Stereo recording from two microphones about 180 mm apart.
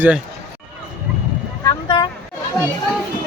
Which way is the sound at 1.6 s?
25° left (ahead or behind).